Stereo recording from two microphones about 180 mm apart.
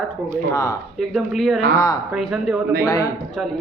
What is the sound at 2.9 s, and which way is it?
Speech, 20° left (ahead or behind).